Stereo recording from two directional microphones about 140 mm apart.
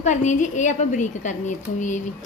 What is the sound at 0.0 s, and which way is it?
A woman's voice, 60° left (ahead or behind).